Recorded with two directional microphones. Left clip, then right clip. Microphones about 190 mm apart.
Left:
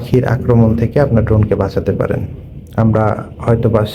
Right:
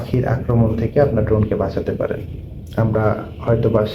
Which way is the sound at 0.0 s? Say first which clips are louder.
Left 6 dB; 55° left (ahead or behind).